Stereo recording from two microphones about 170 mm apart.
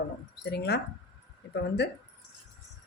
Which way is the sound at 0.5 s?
75° left (ahead or behind).